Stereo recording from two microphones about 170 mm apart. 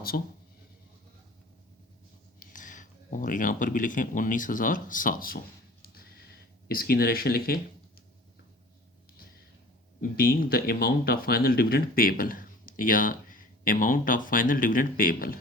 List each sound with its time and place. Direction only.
0.1 s speech: 55° left (ahead or behind)
2.4 s speech: 50° left (ahead or behind)
5.8 s a sound: 60° left (ahead or behind)
10.0 s speech: 65° left (ahead or behind)